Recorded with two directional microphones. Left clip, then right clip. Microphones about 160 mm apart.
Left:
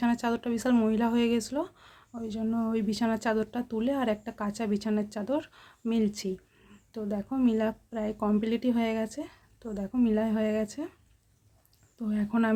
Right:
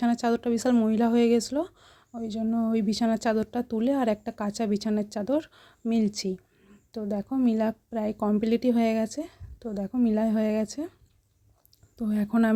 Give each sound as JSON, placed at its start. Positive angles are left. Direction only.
{"t": 0.0, "sound": "speech", "side_deg": -35}
{"t": 11.9, "sound": "speech", "side_deg": -40}